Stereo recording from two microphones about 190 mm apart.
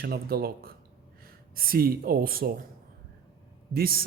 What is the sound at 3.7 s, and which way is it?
Speech, 50° right (ahead or behind).